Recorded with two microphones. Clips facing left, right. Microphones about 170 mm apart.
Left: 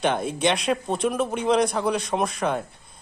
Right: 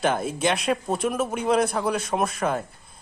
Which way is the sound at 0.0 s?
Centre (ahead or behind).